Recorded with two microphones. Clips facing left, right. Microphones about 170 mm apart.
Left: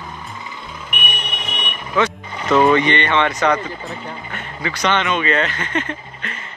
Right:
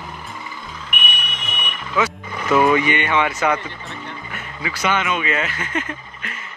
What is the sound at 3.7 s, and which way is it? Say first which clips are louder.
Speech: left 4 dB; 35° left (ahead or behind).